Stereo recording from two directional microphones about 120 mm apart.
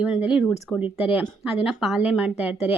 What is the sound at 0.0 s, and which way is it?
A woman's voice, 10° right (ahead or behind).